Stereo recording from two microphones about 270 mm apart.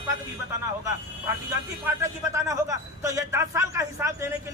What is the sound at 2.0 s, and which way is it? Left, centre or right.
A man's voice, centre.